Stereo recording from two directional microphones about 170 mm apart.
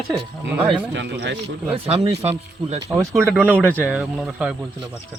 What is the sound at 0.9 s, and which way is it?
Speech, 90° right.